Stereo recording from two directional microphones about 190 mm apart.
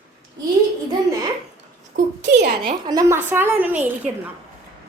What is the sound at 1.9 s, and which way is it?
Speech, 45° right (ahead or behind).